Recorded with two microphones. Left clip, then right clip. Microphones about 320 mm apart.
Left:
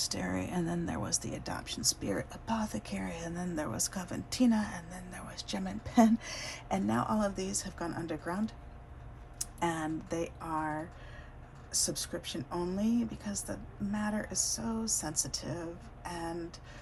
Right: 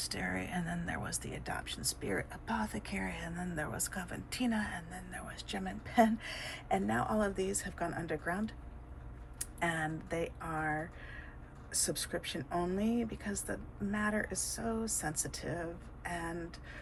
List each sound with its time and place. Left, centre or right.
0.0 s speech: centre
10.4 s speech: left
11.7 s speech: centre